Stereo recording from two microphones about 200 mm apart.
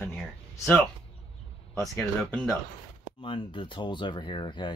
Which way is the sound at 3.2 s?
25° left (ahead or behind).